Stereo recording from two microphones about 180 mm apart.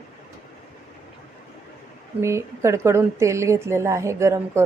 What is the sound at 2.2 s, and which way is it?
Speech, 15° right (ahead or behind).